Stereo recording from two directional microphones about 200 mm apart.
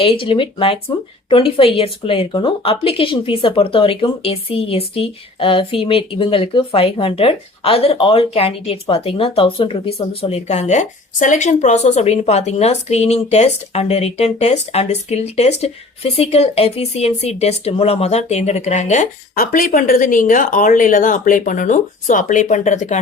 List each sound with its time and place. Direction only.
0.0 s speech: 25° left (ahead or behind)